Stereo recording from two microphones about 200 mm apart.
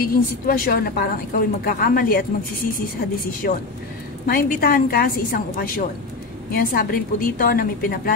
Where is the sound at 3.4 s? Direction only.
45° left (ahead or behind).